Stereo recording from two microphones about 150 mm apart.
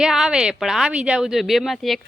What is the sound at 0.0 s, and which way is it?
A woman's voice, 5° right (ahead or behind).